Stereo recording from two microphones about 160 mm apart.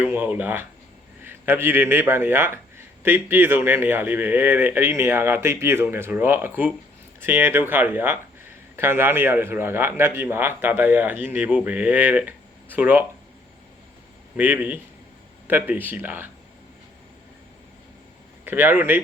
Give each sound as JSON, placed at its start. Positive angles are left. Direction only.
{"t": 0.0, "sound": "speech", "side_deg": -10}
{"t": 14.3, "sound": "speech", "side_deg": -10}
{"t": 18.4, "sound": "speech", "side_deg": -10}